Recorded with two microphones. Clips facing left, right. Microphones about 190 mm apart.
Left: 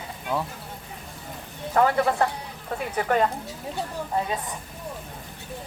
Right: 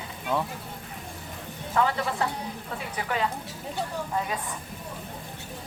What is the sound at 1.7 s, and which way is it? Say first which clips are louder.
Speech: left 5 dB; 50° left (ahead or behind).